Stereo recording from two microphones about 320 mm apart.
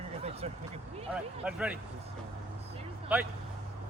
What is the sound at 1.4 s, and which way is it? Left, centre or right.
Speech, centre.